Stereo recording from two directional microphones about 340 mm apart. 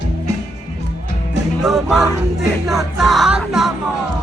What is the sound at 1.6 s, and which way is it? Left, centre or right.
Music, centre.